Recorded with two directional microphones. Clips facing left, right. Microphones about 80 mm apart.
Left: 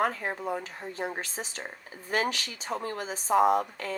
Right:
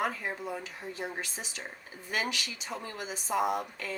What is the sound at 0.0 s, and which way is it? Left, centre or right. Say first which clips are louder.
Speech: left 4 dB; left.